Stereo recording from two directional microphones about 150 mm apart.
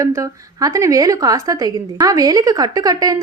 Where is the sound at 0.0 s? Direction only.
20° right (ahead or behind).